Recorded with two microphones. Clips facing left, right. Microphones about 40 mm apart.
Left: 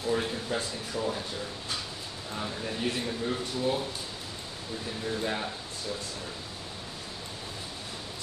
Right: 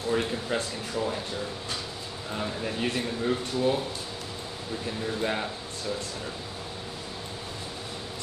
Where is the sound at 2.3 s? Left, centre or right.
Centre.